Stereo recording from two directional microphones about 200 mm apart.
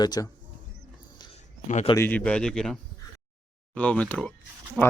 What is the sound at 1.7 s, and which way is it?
Speech, 30° left (ahead or behind).